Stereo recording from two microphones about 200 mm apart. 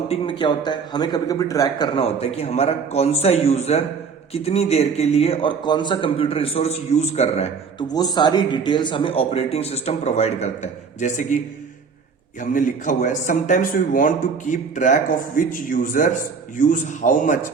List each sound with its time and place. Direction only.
0.1 s a man's voice: 25° left (ahead or behind)
7.9 s speech: 20° left (ahead or behind); by 11.3 s 35° left (ahead or behind)
12.4 s a man's voice: 40° left (ahead or behind)